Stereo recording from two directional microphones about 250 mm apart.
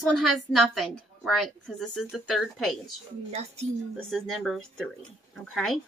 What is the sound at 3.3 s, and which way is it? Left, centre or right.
Speech, right.